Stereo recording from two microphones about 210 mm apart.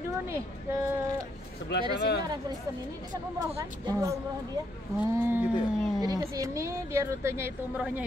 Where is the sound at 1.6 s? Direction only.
55° left (ahead or behind).